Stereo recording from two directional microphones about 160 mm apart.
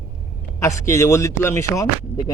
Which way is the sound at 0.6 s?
20° left (ahead or behind).